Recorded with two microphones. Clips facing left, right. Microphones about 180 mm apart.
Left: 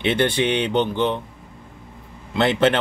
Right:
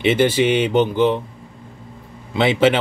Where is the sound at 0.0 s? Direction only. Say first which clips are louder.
Right 4 dB; 5° right (ahead or behind).